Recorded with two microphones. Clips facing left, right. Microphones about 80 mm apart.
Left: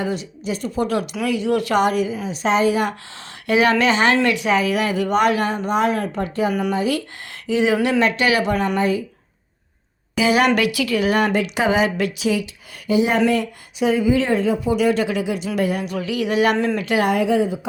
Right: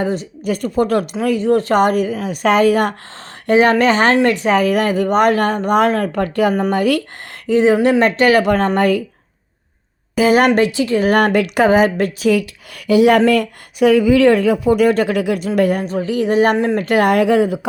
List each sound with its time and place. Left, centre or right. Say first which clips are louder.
0.0 s speech: right 5 dB; right
2.1 s a woman's voice: right 5 dB; right
3.4 s speech: right 4 dB; right
6.5 s speech: right 4 dB; right
6.7 s a woman's voice: right 5 dB; right
7.4 s speech: right 6 dB; right
8.7 s a woman's voice: right 5 dB; right
10.2 s speech: right 5 dB; right
11.0 s speech: right 5 dB; right
15.8 s speech: right 5 dB; right
16.7 s a woman's voice: right 5 dB; right